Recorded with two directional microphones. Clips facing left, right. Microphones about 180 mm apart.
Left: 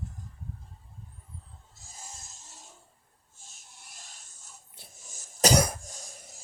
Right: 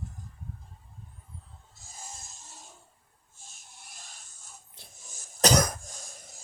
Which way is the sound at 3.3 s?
55° right (ahead or behind).